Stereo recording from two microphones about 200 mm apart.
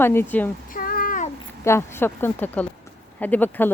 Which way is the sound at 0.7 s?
45° left (ahead or behind).